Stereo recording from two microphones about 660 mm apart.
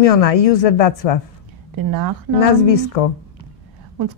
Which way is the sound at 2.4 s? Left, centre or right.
Left.